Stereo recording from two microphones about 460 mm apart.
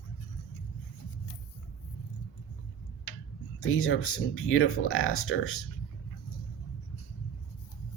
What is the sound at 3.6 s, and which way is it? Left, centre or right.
Speech, left.